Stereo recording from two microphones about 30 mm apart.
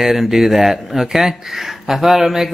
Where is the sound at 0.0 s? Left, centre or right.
Centre.